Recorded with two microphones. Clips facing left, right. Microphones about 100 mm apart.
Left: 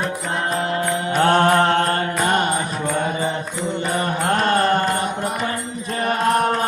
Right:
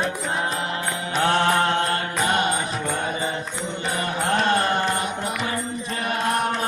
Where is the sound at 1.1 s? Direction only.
50° left (ahead or behind).